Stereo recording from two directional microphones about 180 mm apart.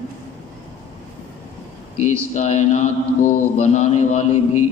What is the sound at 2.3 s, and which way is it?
Mantra, 40° left (ahead or behind).